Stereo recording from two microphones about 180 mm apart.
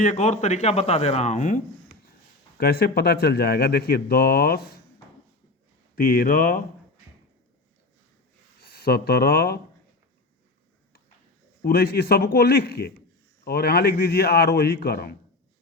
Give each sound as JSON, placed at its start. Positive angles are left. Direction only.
{"t": 0.0, "sound": "speech", "side_deg": 45}
{"t": 2.6, "sound": "a man's voice", "side_deg": 60}
{"t": 6.0, "sound": "speech", "side_deg": 55}
{"t": 8.6, "sound": "speech", "side_deg": 60}
{"t": 11.6, "sound": "a man's voice", "side_deg": 60}